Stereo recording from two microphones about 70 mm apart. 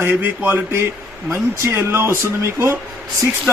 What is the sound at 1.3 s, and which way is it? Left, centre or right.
Speech, right.